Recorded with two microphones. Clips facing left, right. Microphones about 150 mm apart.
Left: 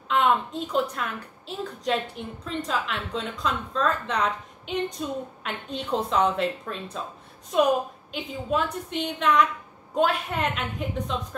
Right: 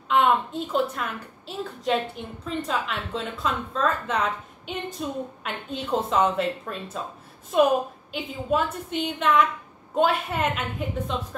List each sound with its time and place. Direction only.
0.1 s a woman's voice: centre (ahead or behind)
8.1 s a woman's voice: 5° right (ahead or behind)